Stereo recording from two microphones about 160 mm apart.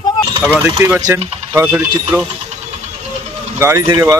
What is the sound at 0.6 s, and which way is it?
Speech, 15° right (ahead or behind).